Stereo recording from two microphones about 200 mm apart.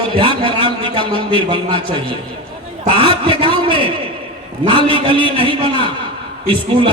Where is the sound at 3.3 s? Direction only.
25° right (ahead or behind).